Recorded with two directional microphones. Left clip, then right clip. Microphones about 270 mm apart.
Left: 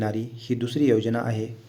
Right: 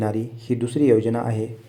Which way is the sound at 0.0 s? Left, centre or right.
Centre.